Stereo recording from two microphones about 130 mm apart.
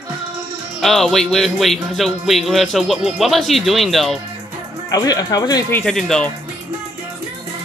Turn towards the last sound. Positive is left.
turn(degrees=5)  # may be behind; listen again after turning